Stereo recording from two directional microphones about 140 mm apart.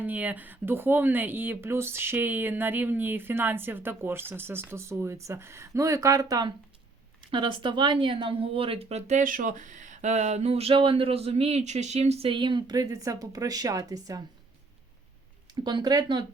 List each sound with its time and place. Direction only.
0.0 s speech: 10° right (ahead or behind)
7.3 s speech: 35° right (ahead or behind)
15.5 s speech: 30° right (ahead or behind)